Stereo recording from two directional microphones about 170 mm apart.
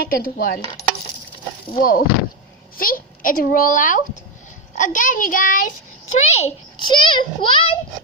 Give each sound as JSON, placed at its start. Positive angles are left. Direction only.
{"t": 0.0, "sound": "dishes", "side_deg": 60}
{"t": 1.8, "sound": "dishes", "side_deg": 60}
{"t": 2.7, "sound": "a woman's voice", "side_deg": 55}